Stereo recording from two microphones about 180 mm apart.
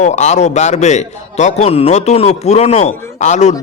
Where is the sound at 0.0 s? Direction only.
40° left (ahead or behind).